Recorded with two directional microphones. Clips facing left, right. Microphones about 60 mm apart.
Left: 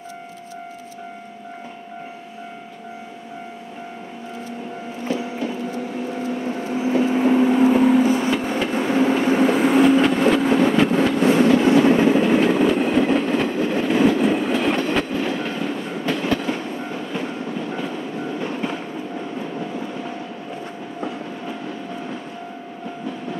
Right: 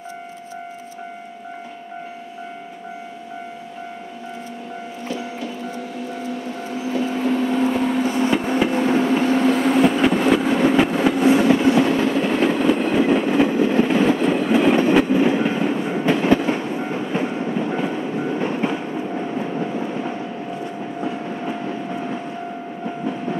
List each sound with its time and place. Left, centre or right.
6.8 s vehicle: left; by 8.3 s centre
8.3 s a sound: centre
9.3 s vehicle: centre
9.8 s vehicle: centre
11.8 s train: centre
12.4 s train: centre
14.2 s train: centre; by 17.8 s right